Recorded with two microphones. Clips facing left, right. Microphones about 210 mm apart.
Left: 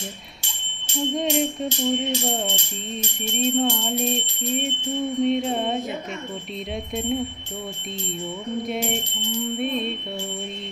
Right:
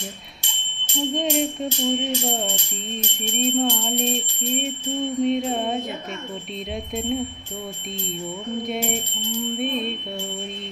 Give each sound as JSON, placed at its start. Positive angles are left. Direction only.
{"t": 0.9, "sound": "music", "side_deg": 0}
{"t": 8.6, "sound": "music", "side_deg": 0}